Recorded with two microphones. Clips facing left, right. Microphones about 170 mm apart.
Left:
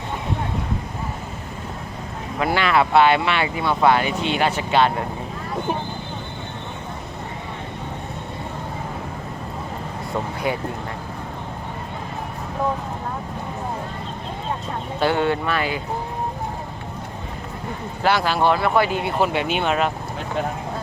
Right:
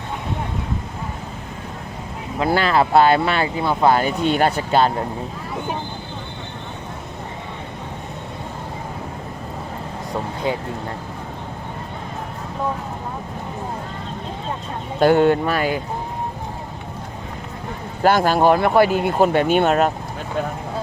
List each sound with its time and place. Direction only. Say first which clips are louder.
2.6 s speech: right 1 dB; 35° right (ahead or behind)
15.0 s speech: right 6 dB; 45° right (ahead or behind)
18.0 s speech: right 4 dB; 45° right (ahead or behind)